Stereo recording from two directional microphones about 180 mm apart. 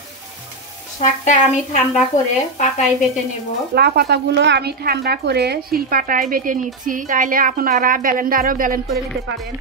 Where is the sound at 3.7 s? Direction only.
60° right (ahead or behind).